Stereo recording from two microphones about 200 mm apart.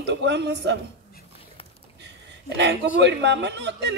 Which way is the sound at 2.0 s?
60° right (ahead or behind).